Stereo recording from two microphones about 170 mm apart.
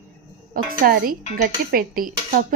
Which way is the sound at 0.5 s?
55° right (ahead or behind).